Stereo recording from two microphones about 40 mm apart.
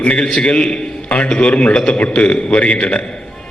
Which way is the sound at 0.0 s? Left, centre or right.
Left.